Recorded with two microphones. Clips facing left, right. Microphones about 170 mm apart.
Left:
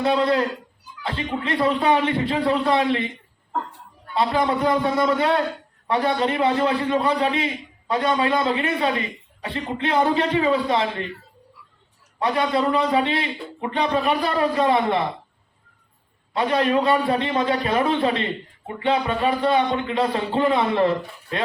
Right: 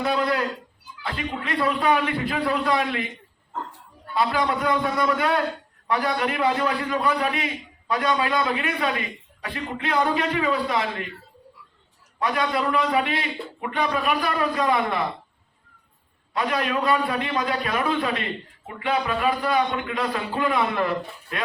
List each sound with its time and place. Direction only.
0.0 s a man's voice: 30° left (ahead or behind)
4.1 s a man's voice: 25° left (ahead or behind)
12.2 s a man's voice: 25° left (ahead or behind)
16.3 s a man's voice: 30° left (ahead or behind)